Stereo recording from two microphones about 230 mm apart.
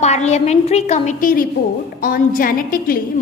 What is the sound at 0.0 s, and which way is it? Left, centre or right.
A woman's voice, left.